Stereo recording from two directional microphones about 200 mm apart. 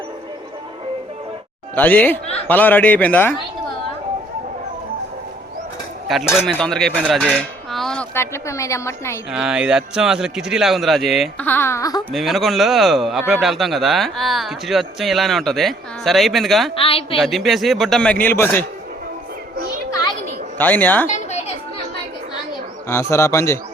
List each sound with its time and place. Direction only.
1.7 s speech: 10° left (ahead or behind)
6.3 s speech: centre (ahead or behind)
9.3 s speech: 5° right (ahead or behind); by 12.0 s 20° left (ahead or behind)
12.1 s speech: centre (ahead or behind)
16.7 s a woman's voice: 30° left (ahead or behind)
17.2 s speech: centre (ahead or behind)
19.5 s music: 50° right (ahead or behind)
19.9 s music: 15° left (ahead or behind)
20.6 s speech: 10° left (ahead or behind)
21.2 s chatter: 35° left (ahead or behind)
22.9 s speech: 15° left (ahead or behind)